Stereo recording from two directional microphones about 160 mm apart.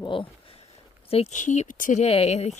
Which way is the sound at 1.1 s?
45° left (ahead or behind).